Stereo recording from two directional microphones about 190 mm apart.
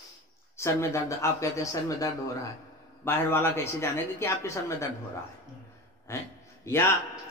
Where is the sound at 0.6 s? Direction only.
15° left (ahead or behind).